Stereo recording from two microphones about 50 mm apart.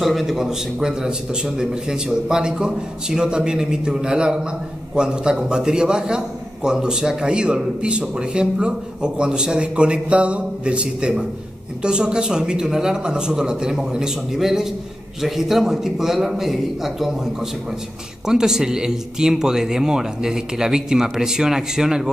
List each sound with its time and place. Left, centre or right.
0.0 s a man's voice: centre